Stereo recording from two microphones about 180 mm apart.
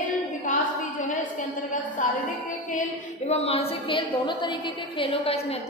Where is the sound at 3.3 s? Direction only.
35° left (ahead or behind).